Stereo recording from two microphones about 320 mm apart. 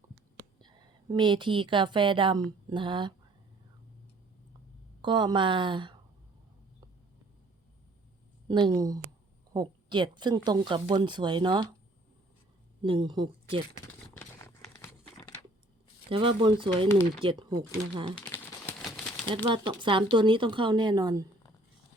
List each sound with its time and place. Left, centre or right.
0.3 s a woman's voice: centre
5.0 s speech: centre
8.4 s speech: centre
12.8 s speech: centre
14.2 s crumpling: centre
16.0 s speech: centre
18.2 s a sound: centre
19.5 s speech: centre